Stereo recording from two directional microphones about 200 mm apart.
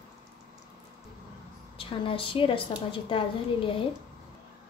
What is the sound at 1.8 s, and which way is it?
A woman's voice, 25° left (ahead or behind).